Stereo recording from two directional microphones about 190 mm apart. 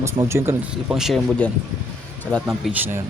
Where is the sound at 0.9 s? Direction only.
Centre (ahead or behind).